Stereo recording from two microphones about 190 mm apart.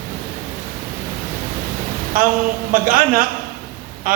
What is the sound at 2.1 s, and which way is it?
A woman's voice, 45° right (ahead or behind).